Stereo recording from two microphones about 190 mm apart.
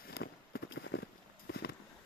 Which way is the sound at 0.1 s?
60° left (ahead or behind).